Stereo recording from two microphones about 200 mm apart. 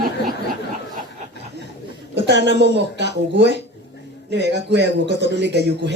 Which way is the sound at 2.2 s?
60° right (ahead or behind).